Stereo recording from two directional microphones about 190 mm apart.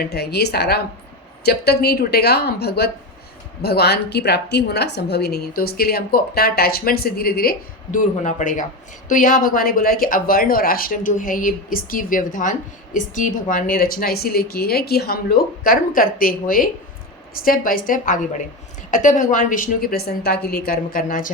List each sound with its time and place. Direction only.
0.0 s a woman's voice: 55° left (ahead or behind)
7.9 s a man's voice: 40° left (ahead or behind)